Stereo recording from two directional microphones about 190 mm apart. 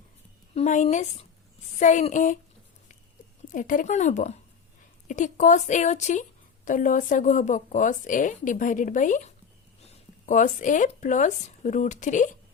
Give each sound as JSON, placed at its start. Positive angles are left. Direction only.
{"t": 0.5, "sound": "speech", "side_deg": 40}
{"t": 3.5, "sound": "speech", "side_deg": 45}